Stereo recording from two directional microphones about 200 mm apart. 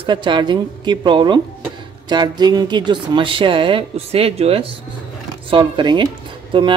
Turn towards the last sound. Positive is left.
turn(degrees=-25)  # may be behind; listen again after turning